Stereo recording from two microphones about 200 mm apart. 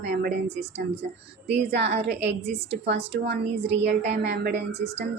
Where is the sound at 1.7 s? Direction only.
60° right (ahead or behind).